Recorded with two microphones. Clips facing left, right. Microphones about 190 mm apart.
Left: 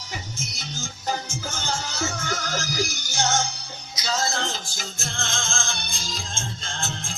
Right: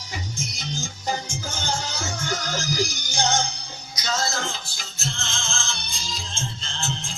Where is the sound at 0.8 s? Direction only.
10° right (ahead or behind).